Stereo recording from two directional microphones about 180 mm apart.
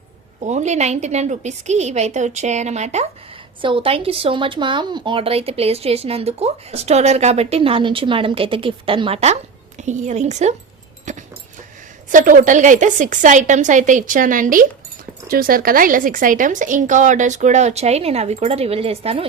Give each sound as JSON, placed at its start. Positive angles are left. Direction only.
{"t": 0.4, "sound": "speech", "side_deg": -40}
{"t": 3.6, "sound": "speech", "side_deg": -30}
{"t": 11.1, "sound": "dog", "side_deg": -45}
{"t": 12.1, "sound": "a woman's voice", "side_deg": -45}